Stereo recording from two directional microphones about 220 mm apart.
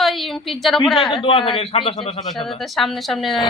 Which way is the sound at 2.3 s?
Centre (ahead or behind).